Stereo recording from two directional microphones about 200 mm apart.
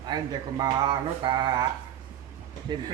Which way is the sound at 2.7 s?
20° right (ahead or behind).